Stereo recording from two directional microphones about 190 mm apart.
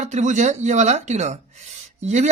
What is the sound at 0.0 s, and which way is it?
Speech, 40° right (ahead or behind).